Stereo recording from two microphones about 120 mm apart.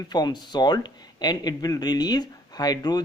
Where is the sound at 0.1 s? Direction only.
35° left (ahead or behind).